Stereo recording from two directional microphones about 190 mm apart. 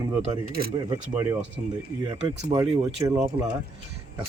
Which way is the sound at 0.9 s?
15° right (ahead or behind).